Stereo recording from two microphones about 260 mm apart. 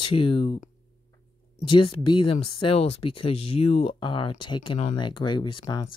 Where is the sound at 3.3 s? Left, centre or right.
Left.